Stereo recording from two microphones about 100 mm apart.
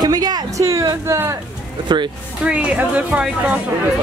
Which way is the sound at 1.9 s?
50° right (ahead or behind).